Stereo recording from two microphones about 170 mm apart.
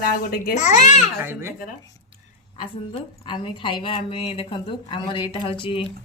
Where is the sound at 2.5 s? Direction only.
30° left (ahead or behind).